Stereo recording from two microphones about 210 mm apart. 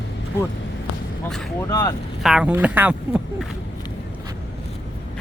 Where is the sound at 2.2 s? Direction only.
5° right (ahead or behind).